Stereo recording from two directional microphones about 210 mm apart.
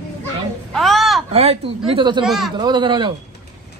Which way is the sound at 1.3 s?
30° right (ahead or behind).